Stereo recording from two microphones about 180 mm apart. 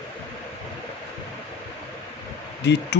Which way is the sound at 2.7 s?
75° left (ahead or behind).